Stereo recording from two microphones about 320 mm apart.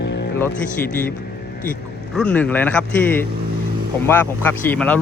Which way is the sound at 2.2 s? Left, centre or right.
Centre.